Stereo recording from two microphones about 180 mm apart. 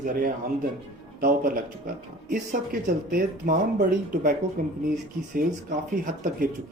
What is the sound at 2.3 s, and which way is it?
Speech, 45° right (ahead or behind).